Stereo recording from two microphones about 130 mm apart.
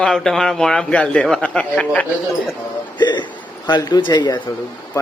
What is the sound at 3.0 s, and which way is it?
Speech, 35° left (ahead or behind).